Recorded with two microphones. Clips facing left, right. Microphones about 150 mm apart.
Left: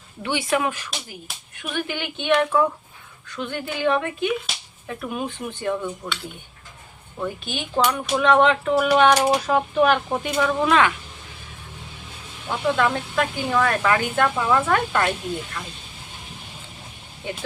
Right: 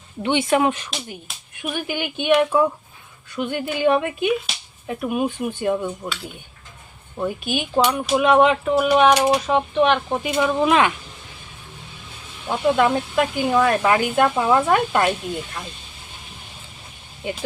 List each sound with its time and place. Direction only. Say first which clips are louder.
0.2 s speech: right 5 dB; 25° right (ahead or behind)
1.6 s speech: right 2 dB; 15° right (ahead or behind)
7.2 s speech: right 5 dB; 15° right (ahead or behind)
12.5 s speech: right 4 dB; 20° right (ahead or behind)